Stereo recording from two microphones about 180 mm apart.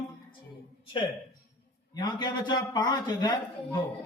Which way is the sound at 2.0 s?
25° left (ahead or behind).